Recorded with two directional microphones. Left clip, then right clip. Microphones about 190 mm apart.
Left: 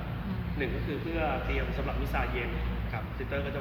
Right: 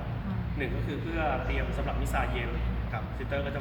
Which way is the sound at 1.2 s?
5° right (ahead or behind).